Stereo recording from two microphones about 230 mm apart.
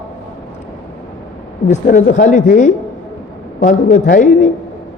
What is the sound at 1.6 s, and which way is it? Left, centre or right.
A woman's voice, left.